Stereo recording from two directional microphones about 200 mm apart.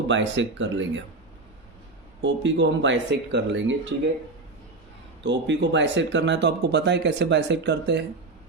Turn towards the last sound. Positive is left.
turn(degrees=-60)  # may be behind; listen again after turning